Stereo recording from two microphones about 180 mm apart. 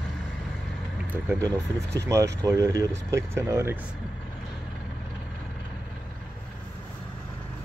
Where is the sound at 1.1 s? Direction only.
10° right (ahead or behind).